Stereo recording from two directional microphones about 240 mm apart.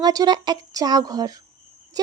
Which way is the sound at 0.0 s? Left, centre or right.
Centre.